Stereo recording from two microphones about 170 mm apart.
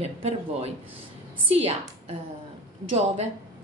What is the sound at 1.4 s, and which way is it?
Speech, 35° right (ahead or behind).